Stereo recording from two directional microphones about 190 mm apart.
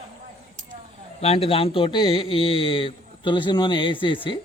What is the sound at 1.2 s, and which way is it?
A man's voice, 30° left (ahead or behind).